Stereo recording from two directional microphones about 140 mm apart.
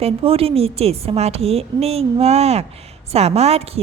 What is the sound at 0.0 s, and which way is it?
A woman's voice, 45° right (ahead or behind).